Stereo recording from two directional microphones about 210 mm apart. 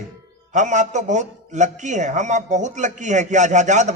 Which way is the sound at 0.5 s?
35° right (ahead or behind).